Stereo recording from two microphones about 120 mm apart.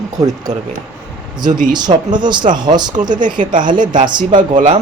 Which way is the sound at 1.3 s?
35° right (ahead or behind).